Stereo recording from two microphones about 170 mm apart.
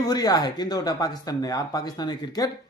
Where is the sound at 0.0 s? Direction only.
20° left (ahead or behind).